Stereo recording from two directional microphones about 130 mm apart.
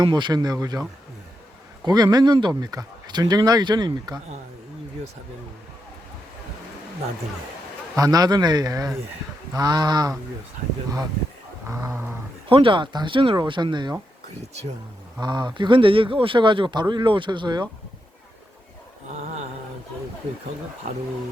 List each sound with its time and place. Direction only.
0.0 s a man's voice: 35° right (ahead or behind)
7.9 s a man's voice: 30° right (ahead or behind)
11.7 s speech: 25° right (ahead or behind)
12.5 s a man's voice: 45° right (ahead or behind)
15.2 s a man's voice: 35° right (ahead or behind)